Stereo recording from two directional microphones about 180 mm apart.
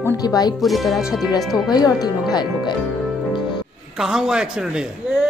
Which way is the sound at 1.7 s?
20° left (ahead or behind).